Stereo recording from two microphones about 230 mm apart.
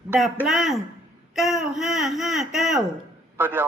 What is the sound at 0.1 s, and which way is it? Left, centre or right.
A man's voice, centre.